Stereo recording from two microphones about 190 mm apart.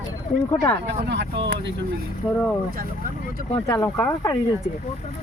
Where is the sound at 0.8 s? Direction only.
65° right (ahead or behind).